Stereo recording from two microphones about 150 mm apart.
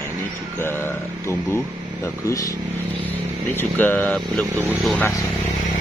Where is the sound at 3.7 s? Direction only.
10° left (ahead or behind).